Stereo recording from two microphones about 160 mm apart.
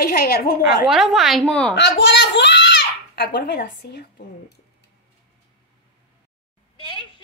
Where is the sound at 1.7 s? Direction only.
90° left.